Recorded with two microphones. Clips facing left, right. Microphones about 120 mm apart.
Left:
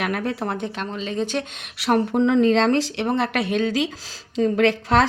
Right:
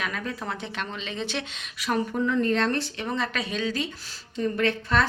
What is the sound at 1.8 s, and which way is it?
A woman's voice, 65° left (ahead or behind).